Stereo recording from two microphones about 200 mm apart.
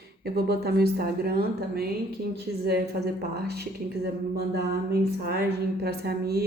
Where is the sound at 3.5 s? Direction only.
50° right (ahead or behind).